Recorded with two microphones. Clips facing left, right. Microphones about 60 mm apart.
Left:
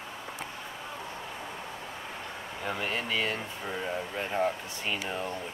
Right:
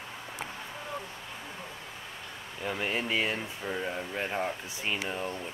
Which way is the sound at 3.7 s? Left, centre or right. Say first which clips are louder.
Even; centre.